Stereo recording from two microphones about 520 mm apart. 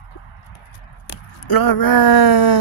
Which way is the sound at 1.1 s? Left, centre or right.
Left.